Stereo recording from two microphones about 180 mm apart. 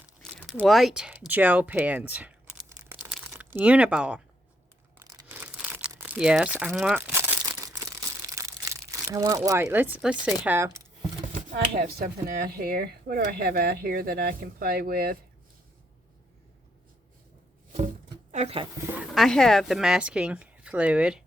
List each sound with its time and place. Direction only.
0.2 s crumpling: 5° left (ahead or behind)
0.6 s speech: centre (ahead or behind)
4.9 s tearing: 20° right (ahead or behind)
5.3 s crumpling: 10° right (ahead or behind)
10.4 s speech: 10° right (ahead or behind)
11.3 s speech: 50° right (ahead or behind)
17.7 s music: 45° right (ahead or behind)
18.9 s speech: 5° right (ahead or behind)